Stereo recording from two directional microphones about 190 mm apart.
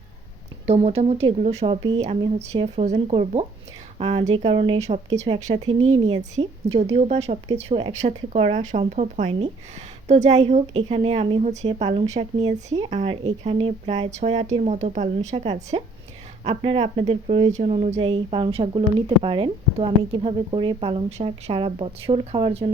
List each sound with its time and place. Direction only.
0.7 s a woman's voice: 35° right (ahead or behind)
6.9 s a woman's voice: 30° right (ahead or behind)